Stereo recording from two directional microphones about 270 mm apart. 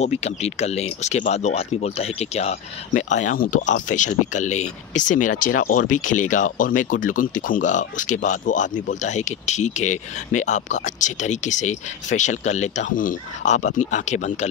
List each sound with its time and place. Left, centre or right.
0.2 s speech: left